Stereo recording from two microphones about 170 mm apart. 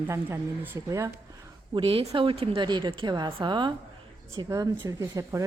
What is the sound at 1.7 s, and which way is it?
A woman's voice, 30° right (ahead or behind).